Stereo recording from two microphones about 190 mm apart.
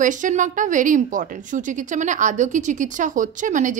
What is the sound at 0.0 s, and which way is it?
A woman's voice, 40° right (ahead or behind).